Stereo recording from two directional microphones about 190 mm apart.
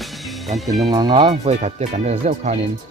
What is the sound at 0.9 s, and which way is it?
Speech, 25° right (ahead or behind).